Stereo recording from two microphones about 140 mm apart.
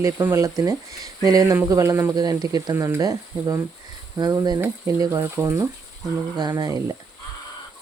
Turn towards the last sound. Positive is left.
turn(degrees=-25)  # may be behind; listen again after turning